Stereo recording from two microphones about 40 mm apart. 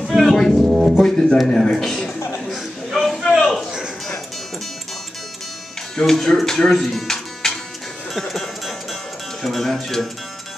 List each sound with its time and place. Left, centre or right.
0.0 s music: centre
0.6 s speech: centre
0.9 s a man's voice: centre
2.5 s a sound: centre
5.9 s a man's voice: centre
9.4 s a man's voice: centre